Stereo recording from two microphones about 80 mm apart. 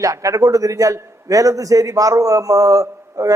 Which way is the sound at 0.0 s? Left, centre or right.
Right.